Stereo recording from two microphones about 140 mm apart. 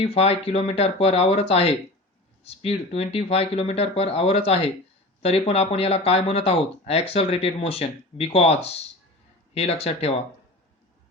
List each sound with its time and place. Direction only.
0.0 s speech: 45° left (ahead or behind)